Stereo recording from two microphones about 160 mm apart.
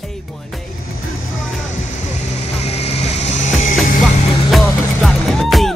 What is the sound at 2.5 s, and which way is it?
Vehicle, 40° left (ahead or behind).